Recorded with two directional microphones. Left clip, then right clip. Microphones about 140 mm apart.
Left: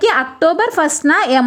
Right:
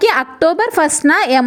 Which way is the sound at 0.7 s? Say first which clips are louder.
Right 1 dB; 15° right (ahead or behind).